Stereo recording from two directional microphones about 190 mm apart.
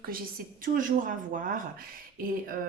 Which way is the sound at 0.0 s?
50° right (ahead or behind).